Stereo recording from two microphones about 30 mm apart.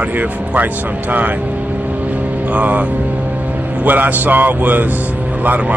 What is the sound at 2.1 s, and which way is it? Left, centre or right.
Music, right.